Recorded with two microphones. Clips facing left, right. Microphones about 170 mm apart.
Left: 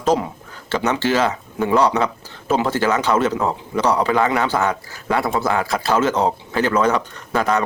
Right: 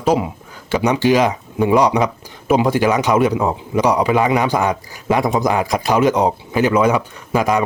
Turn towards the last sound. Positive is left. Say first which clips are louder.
# right 3 dB
turn(degrees=-10)  # may be behind; listen again after turning